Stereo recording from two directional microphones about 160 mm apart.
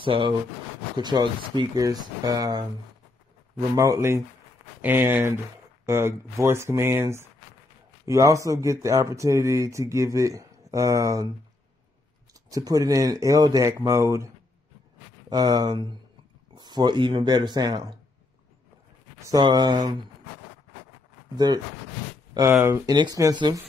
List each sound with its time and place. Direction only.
0.0 s speech: 30° right (ahead or behind)
3.7 s speech: 20° right (ahead or behind)
12.4 s speech: 20° right (ahead or behind)
19.2 s speech: 25° right (ahead or behind)
22.3 s speech: 15° right (ahead or behind)
22.8 s speech: 25° right (ahead or behind)